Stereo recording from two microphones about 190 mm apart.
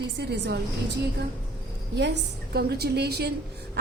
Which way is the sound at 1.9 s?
65° right (ahead or behind).